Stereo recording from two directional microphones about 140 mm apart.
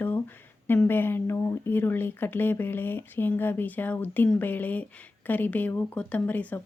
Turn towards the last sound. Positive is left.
turn(degrees=10)  # may be behind; listen again after turning